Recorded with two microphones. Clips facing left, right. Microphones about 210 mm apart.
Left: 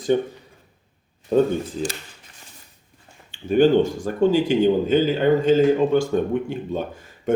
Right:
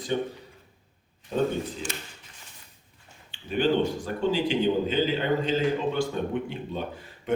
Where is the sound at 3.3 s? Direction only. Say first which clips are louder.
Left 8 dB; 45° left (ahead or behind).